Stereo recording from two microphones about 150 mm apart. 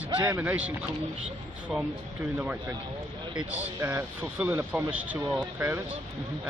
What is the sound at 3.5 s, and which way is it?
Speech, 10° right (ahead or behind).